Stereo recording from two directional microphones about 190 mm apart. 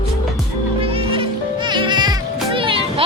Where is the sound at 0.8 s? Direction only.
30° right (ahead or behind).